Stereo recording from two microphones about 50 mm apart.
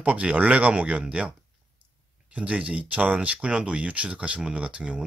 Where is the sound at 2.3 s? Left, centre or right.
Right.